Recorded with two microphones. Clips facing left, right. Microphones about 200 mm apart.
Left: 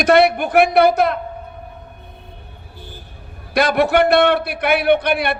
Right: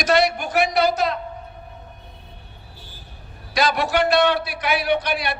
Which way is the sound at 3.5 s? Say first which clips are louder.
Left 6 dB; 55° left (ahead or behind).